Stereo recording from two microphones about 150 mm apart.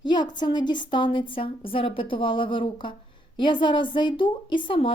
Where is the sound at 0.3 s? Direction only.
30° left (ahead or behind).